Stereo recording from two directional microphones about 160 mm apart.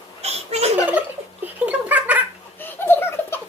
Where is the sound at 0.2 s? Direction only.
40° right (ahead or behind).